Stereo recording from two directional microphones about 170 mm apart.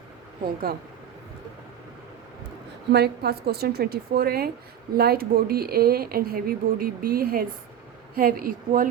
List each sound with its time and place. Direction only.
0.4 s speech: 65° right (ahead or behind)
2.9 s a woman's voice: 70° right (ahead or behind)